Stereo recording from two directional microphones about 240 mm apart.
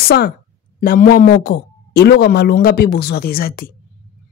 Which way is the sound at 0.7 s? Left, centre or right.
Left.